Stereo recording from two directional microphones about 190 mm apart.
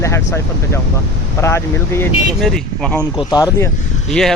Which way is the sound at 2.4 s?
5° left (ahead or behind).